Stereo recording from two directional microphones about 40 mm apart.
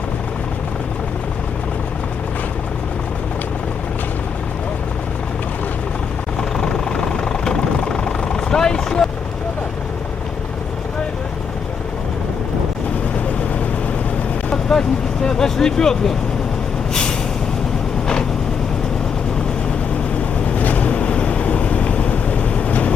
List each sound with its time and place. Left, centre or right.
6.6 s vehicle: centre
14.5 s vehicle: centre
20.6 s vehicle: left